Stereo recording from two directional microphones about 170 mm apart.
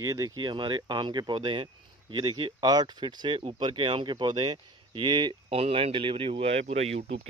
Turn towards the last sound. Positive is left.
turn(degrees=-40)  # may be behind; listen again after turning